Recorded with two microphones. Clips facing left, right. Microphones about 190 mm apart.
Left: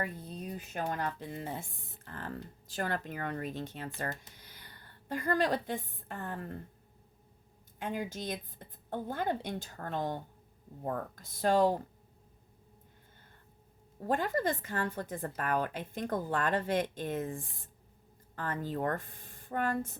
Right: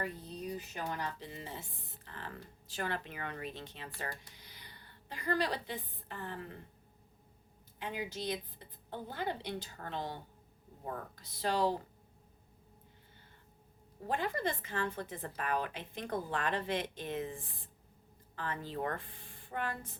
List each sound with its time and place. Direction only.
0.0 s a woman's voice: 50° left (ahead or behind)
7.8 s speech: 50° left (ahead or behind)
14.1 s speech: 45° left (ahead or behind)